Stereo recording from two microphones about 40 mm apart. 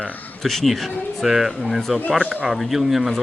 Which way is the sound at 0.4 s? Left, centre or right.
Centre.